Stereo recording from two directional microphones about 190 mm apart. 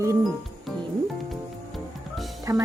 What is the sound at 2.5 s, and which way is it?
Speech, 15° right (ahead or behind).